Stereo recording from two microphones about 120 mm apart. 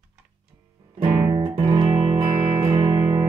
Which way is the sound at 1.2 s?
35° right (ahead or behind).